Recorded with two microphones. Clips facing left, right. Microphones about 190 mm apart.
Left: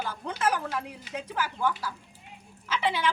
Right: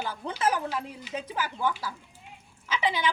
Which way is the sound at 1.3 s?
10° right (ahead or behind).